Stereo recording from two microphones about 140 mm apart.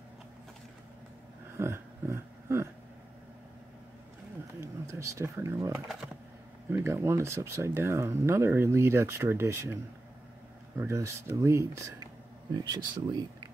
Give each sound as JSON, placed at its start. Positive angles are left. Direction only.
{"t": 1.6, "sound": "a sound", "side_deg": -20}
{"t": 4.6, "sound": "speech", "side_deg": -20}
{"t": 10.8, "sound": "speech", "side_deg": -20}